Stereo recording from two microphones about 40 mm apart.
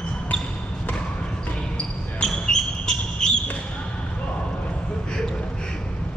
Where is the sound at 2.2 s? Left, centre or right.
Centre.